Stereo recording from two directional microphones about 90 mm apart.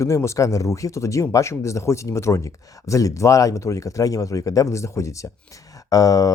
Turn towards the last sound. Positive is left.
turn(degrees=40)  # may be behind; listen again after turning